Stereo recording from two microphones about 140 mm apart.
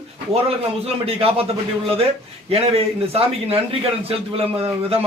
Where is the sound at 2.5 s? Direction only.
45° right (ahead or behind).